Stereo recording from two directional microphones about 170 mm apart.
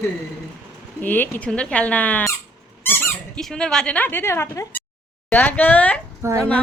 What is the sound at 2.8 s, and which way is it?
Squeak, 10° left (ahead or behind).